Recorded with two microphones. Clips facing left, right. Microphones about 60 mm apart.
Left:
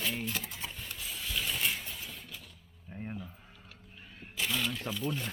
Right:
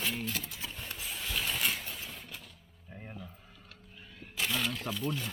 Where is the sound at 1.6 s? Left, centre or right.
Centre.